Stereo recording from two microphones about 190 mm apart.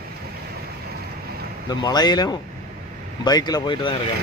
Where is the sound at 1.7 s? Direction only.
20° left (ahead or behind).